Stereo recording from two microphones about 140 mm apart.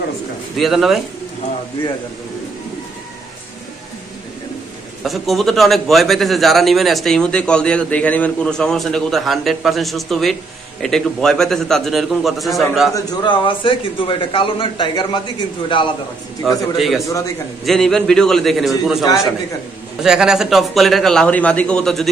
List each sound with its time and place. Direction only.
0.6 s a man's voice: centre (ahead or behind)
5.0 s a man's voice: centre (ahead or behind)
13.2 s a man's voice: 35° left (ahead or behind)
16.4 s a man's voice: centre (ahead or behind)